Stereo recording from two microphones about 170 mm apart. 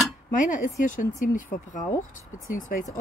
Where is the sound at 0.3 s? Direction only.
45° left (ahead or behind).